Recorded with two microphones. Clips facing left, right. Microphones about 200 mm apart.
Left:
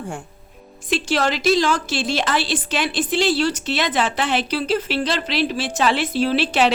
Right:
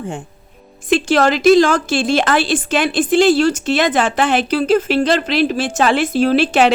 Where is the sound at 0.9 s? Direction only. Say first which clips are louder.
Right 7 dB; 50° right (ahead or behind).